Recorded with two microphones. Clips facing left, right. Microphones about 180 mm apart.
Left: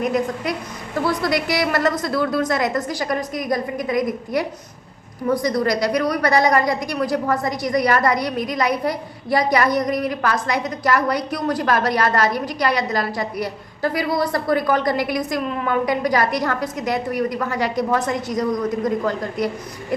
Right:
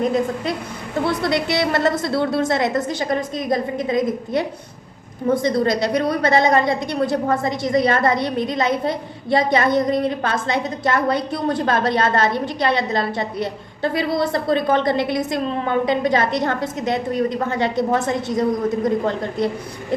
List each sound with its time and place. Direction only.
0.0 s a woman's voice: 25° right (ahead or behind)